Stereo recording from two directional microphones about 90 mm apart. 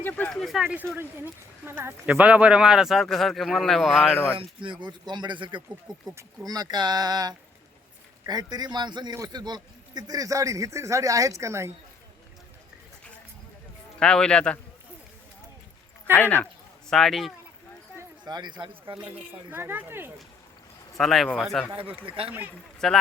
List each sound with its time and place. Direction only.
0.0 s a sound: 20° left (ahead or behind)
0.3 s speech: 5° left (ahead or behind)
0.9 s speech: 25° right (ahead or behind)
2.0 s speech: 15° right (ahead or behind)
4.4 s speech: 70° right (ahead or behind)
6.1 s a man's voice: 40° right (ahead or behind)
14.0 s a man's voice: 10° left (ahead or behind)
16.1 s a man's voice: 20° left (ahead or behind)
16.9 s speech: 5° left (ahead or behind)
18.3 s speech: 50° right (ahead or behind); by 18.9 s 70° right (ahead or behind)
19.0 s speech: 20° right (ahead or behind)
21.0 s speech: centre (ahead or behind)
22.0 s speech: 90° right
22.8 s speech: 5° left (ahead or behind)